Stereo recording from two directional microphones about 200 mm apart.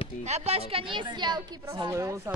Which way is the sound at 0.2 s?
35° right (ahead or behind).